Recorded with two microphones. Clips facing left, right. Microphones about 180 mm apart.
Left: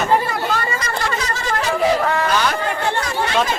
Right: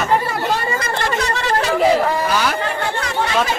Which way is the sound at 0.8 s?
65° right (ahead or behind).